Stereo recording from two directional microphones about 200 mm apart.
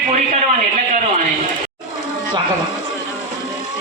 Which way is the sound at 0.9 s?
40° right (ahead or behind).